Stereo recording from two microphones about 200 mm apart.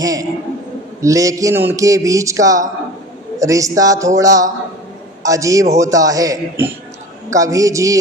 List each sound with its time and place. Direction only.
0.0 s a man's voice: 15° right (ahead or behind)